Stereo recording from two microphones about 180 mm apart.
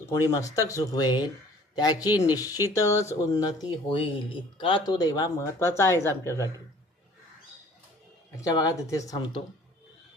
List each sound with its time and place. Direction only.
0.0 s speech: 20° left (ahead or behind)
8.4 s speech: 20° left (ahead or behind)